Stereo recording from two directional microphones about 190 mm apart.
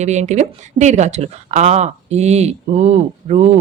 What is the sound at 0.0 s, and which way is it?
Speech, 35° right (ahead or behind).